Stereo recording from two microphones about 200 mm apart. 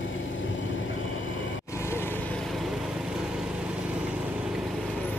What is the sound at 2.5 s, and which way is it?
Vehicle, centre (ahead or behind).